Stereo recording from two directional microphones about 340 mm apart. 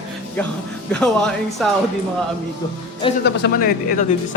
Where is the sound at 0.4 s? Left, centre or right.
Centre.